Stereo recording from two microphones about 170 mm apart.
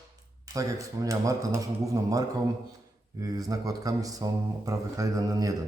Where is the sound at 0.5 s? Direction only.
20° right (ahead or behind).